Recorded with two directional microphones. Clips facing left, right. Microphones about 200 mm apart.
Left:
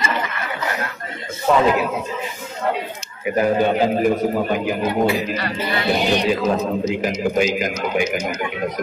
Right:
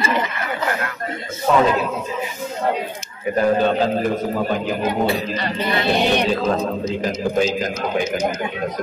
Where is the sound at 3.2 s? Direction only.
10° left (ahead or behind).